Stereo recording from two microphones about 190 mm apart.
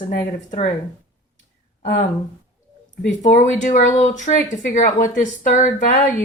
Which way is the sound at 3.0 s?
40° left (ahead or behind).